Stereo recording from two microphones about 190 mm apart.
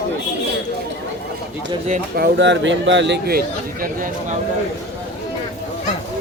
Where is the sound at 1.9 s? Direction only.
55° right (ahead or behind).